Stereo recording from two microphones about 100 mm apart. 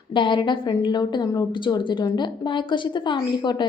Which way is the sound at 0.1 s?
55° left (ahead or behind).